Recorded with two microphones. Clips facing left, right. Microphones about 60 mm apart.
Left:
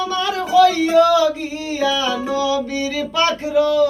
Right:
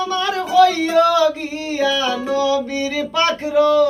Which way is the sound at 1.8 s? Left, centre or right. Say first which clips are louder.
Even; right.